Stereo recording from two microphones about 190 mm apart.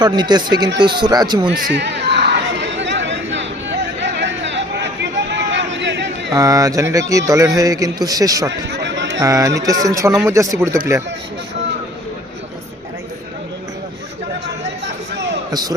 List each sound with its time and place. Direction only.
0.0 s speech: 20° right (ahead or behind)
1.7 s chatter: 65° right (ahead or behind)
6.3 s speech: 15° right (ahead or behind)
8.7 s run: 65° right (ahead or behind)
9.2 s speech: 15° right (ahead or behind)
14.4 s a sound: 65° right (ahead or behind)